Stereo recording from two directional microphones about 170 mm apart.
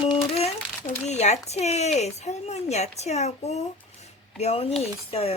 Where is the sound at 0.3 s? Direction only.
40° left (ahead or behind).